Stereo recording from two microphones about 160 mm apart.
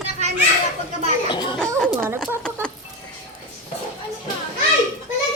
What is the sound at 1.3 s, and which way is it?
Speech, 30° left (ahead or behind).